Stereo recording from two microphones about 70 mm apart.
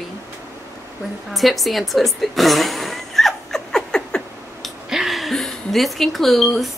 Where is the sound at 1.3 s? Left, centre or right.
Centre.